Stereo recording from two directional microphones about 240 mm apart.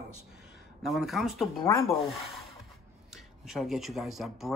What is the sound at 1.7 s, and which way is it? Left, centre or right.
Speech, centre.